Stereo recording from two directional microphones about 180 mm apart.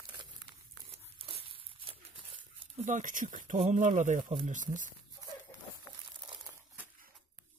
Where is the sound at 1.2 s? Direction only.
30° right (ahead or behind).